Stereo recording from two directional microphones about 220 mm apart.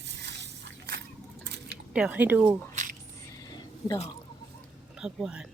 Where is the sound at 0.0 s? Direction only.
50° right (ahead or behind).